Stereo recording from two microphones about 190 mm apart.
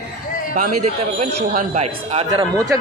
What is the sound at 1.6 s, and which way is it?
A man's voice, 35° right (ahead or behind).